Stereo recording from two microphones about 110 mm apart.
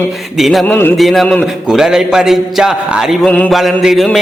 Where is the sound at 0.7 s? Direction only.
15° left (ahead or behind).